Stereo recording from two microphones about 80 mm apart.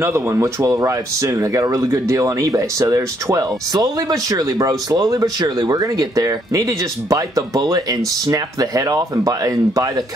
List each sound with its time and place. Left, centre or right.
0.4 s speech: right